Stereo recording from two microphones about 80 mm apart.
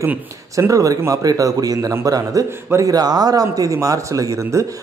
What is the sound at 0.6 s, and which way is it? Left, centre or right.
A man's voice, right.